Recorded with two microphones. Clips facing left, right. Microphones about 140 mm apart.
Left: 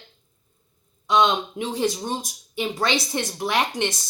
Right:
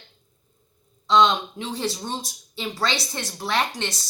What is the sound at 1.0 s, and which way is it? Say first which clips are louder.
Speech: right 1 dB; 15° left (ahead or behind).